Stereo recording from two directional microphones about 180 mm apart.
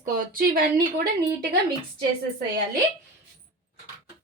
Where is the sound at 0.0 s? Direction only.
50° right (ahead or behind).